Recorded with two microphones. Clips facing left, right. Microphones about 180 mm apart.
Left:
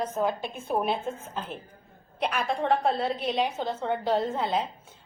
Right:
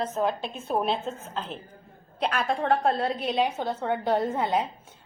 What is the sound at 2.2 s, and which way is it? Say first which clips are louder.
Speech: right 1 dB; 5° left (ahead or behind).